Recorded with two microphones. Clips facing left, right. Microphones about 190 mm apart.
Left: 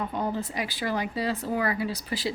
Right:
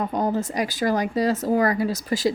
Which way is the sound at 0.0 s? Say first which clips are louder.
Right 6 dB; 45° right (ahead or behind).